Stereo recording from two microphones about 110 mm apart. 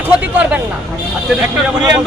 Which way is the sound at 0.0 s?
15° right (ahead or behind).